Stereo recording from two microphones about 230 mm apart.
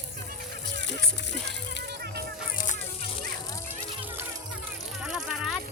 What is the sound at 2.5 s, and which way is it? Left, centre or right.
Music, left.